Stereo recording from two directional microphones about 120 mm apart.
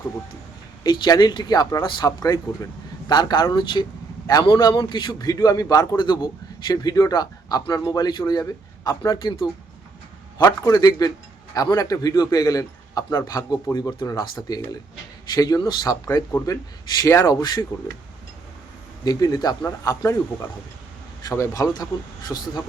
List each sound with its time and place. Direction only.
0.9 s speech: 35° left (ahead or behind)
19.0 s speech: 35° left (ahead or behind)